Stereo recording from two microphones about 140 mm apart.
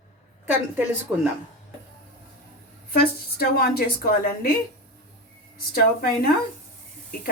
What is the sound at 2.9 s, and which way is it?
A woman's voice, 90° left.